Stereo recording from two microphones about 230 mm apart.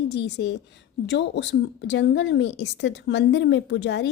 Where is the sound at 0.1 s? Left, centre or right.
Left.